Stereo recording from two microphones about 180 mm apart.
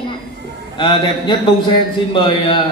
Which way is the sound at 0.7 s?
25° left (ahead or behind).